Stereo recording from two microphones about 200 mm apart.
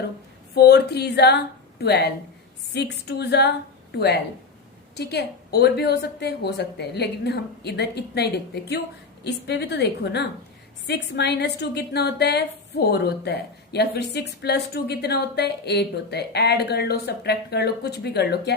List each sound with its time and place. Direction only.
0.5 s a woman's voice: 55° left (ahead or behind)